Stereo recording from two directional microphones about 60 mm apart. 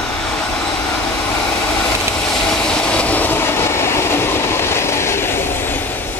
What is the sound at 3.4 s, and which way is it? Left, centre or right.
Train, left.